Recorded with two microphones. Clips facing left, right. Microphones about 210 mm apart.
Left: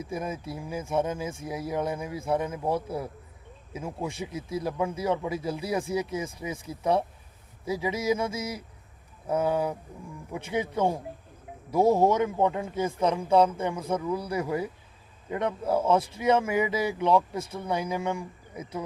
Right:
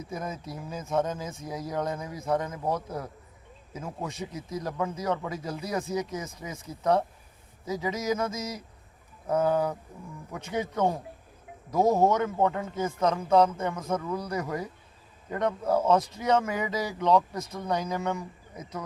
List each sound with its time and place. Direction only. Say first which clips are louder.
0.0 s speech: left 3 dB; 10° left (ahead or behind)
11.7 s speech: left 1 dB; 10° left (ahead or behind)
17.3 s speech: left 2 dB; 30° left (ahead or behind)
17.7 s speech: even; 10° left (ahead or behind)